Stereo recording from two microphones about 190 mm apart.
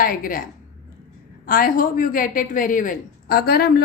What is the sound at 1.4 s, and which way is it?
A woman's voice, 45° left (ahead or behind).